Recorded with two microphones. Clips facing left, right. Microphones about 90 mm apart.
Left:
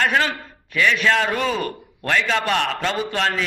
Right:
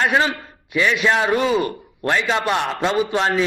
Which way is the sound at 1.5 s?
Centre (ahead or behind).